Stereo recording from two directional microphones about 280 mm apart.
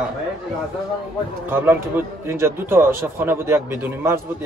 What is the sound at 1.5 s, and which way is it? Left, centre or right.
A man's voice, centre.